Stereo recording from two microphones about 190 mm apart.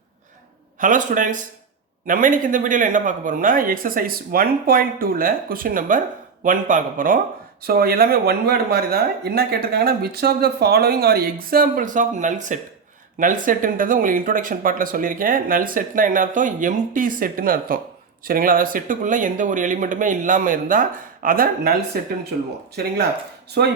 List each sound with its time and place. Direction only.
0.8 s speech: 45° right (ahead or behind); by 23.7 s 60° right (ahead or behind)